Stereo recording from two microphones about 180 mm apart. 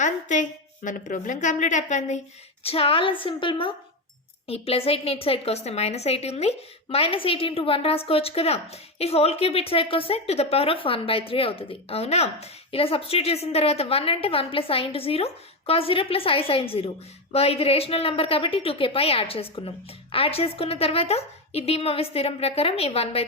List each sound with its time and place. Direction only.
0.0 s a woman's voice: 45° left (ahead or behind)